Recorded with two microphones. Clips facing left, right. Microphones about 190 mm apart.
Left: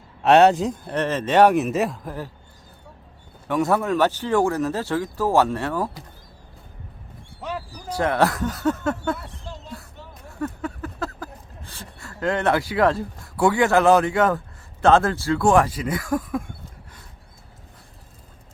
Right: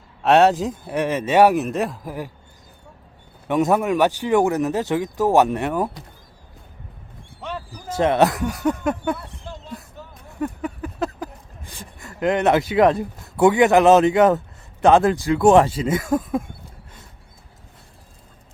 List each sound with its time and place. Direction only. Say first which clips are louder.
0.2 s speech: even; centre (ahead or behind)
3.4 s speech: right 3 dB; 20° right (ahead or behind)
7.9 s speech: right 3 dB; 20° right (ahead or behind)
10.3 s speech: right 2 dB; 15° right (ahead or behind)